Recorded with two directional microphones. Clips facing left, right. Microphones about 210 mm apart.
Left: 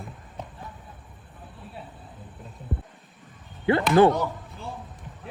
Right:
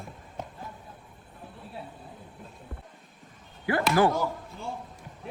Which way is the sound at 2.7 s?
20° left (ahead or behind).